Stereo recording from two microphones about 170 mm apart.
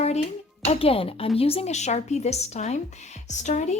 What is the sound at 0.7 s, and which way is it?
Speech, 35° left (ahead or behind).